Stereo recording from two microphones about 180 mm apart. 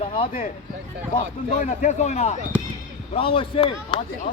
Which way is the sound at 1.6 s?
40° left (ahead or behind).